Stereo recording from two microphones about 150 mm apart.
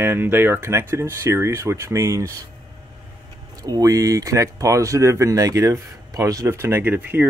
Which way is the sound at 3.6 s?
25° right (ahead or behind).